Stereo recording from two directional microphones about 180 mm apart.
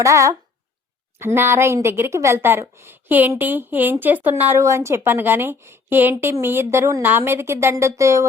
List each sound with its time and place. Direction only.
0.0 s a woman's voice: 15° right (ahead or behind)